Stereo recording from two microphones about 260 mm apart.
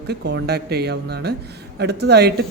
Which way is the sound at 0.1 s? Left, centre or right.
Right.